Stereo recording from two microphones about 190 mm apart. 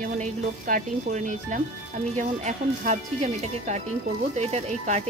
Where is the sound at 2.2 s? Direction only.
40° right (ahead or behind).